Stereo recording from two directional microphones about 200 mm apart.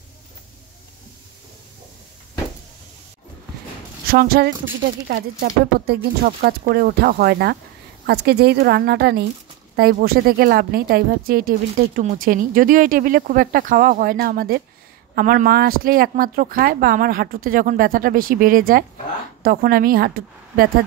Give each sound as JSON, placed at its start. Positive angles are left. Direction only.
{"t": 4.1, "sound": "speech", "side_deg": -50}